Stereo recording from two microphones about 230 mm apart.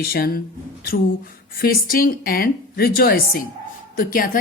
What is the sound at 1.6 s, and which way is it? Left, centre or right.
A woman's voice, left.